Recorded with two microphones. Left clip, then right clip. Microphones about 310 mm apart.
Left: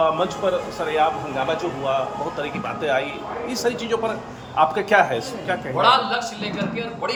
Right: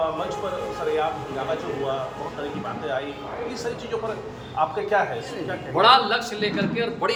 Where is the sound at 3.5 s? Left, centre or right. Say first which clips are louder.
Left 7 dB; left.